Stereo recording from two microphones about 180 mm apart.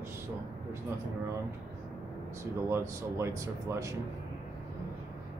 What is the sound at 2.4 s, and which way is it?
Speech, 15° right (ahead or behind).